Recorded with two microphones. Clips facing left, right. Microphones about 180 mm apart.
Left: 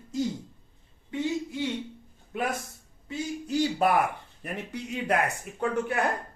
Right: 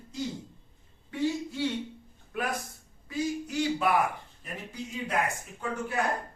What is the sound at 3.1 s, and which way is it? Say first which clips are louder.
Speech: even; 30° left (ahead or behind).